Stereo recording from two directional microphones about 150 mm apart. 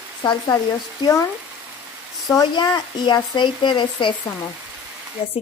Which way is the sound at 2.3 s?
25° left (ahead or behind).